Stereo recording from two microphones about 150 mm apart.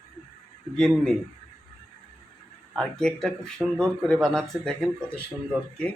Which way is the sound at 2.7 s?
5° left (ahead or behind).